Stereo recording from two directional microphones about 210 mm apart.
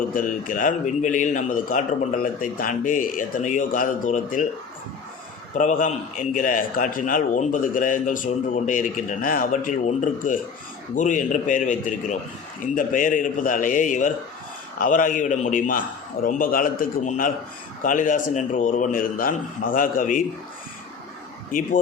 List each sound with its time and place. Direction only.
0.1 s a man's voice: 40° left (ahead or behind)
5.5 s a man's voice: 40° left (ahead or behind)